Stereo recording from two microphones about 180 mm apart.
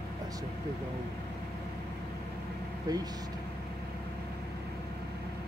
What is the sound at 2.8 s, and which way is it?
Speech, 20° right (ahead or behind).